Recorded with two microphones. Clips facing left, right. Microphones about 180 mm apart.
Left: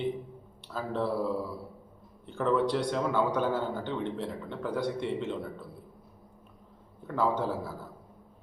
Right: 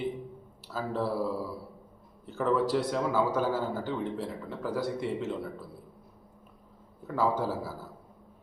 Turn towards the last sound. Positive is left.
turn(degrees=-5)  # may be behind; listen again after turning